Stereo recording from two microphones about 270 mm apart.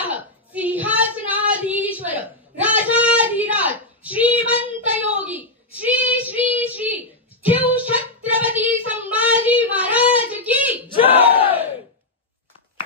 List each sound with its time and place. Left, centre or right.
0.0 s female singing: centre
4.6 s child singing: centre
11.1 s battle cry: centre